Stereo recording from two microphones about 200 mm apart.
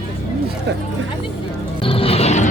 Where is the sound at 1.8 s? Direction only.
25° left (ahead or behind).